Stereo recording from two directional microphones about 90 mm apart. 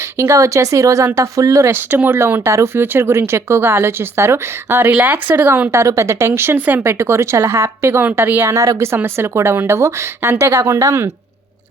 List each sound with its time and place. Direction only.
0.2 s a woman's voice: 35° right (ahead or behind)
1.7 s speech: 25° right (ahead or behind)
4.9 s speech: 15° right (ahead or behind)
5.8 s a woman's voice: 35° right (ahead or behind)